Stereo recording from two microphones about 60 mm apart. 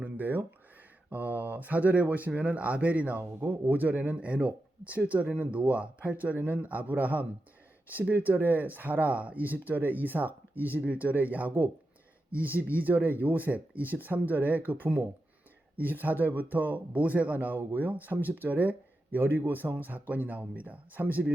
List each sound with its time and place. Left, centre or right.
0.0 s a sound: right
1.1 s speech: right
8.3 s speech: right